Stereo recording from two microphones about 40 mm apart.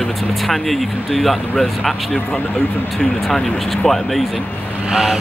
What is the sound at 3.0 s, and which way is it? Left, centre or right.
Speech, centre.